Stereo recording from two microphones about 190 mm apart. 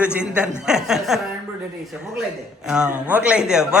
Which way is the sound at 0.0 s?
5° right (ahead or behind).